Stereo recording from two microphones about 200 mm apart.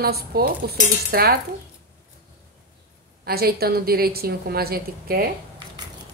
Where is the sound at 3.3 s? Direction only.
50° right (ahead or behind).